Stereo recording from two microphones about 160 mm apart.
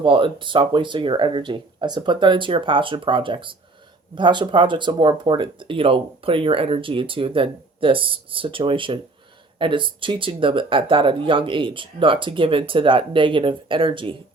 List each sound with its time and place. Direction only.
0.0 s speech: 30° right (ahead or behind)